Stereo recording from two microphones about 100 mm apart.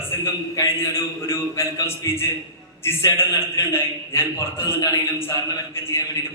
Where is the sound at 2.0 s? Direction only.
35° left (ahead or behind).